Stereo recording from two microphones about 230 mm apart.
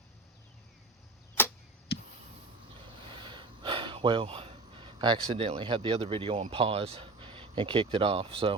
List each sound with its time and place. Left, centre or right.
1.4 s arrow: centre
1.9 s a sound: left
3.2 s speech: right